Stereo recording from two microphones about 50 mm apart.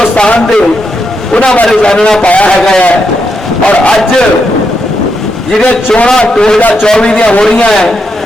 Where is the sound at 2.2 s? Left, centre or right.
Left.